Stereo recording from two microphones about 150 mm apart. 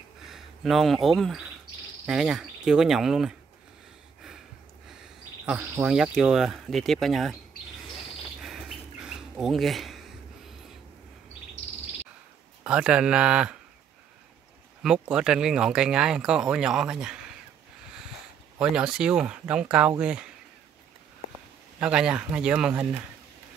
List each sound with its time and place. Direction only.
0.3 s speech: centre (ahead or behind)
5.4 s speech: 10° right (ahead or behind)
8.4 s bird: centre (ahead or behind)
12.6 s speech: 5° right (ahead or behind)
14.8 s speech: 5° right (ahead or behind)
18.6 s speech: 5° right (ahead or behind)
21.7 s speech: 5° right (ahead or behind)